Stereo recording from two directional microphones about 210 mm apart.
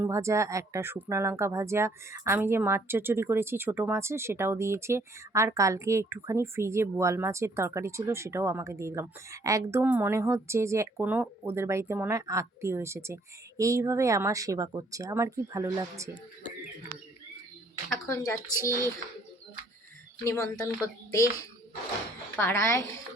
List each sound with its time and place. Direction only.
0.0 s a woman's voice: 15° right (ahead or behind)
18.1 s speech: 15° left (ahead or behind)
20.2 s speech: 15° left (ahead or behind)
22.4 s speech: 10° left (ahead or behind)